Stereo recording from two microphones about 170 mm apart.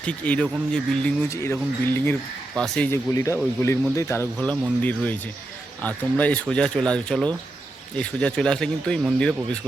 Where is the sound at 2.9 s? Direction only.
20° left (ahead or behind).